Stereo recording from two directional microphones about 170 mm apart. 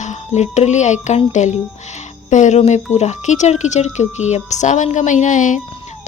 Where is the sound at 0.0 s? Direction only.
45° left (ahead or behind).